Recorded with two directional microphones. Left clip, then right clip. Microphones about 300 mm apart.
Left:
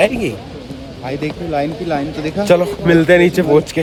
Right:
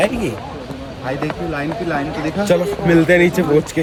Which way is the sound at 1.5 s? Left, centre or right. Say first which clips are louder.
Left 5 dB; left.